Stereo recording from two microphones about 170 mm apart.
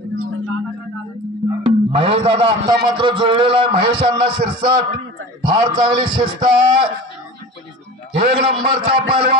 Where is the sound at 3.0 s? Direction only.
30° right (ahead or behind).